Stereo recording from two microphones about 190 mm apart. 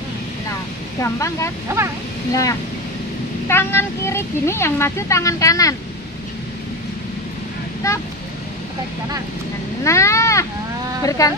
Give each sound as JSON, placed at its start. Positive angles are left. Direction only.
{"t": 1.0, "sound": "speech", "side_deg": 15}
{"t": 1.7, "sound": "speech", "side_deg": -15}
{"t": 3.4, "sound": "speech", "side_deg": 10}
{"t": 7.8, "sound": "speech", "side_deg": 15}
{"t": 9.8, "sound": "speech", "side_deg": 15}